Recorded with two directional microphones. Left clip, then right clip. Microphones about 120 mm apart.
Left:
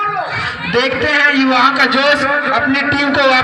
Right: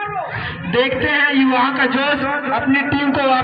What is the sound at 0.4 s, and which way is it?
A man's voice, 20° left (ahead or behind).